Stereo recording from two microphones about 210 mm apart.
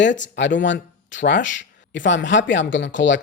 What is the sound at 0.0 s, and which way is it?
Speech, 60° left (ahead or behind).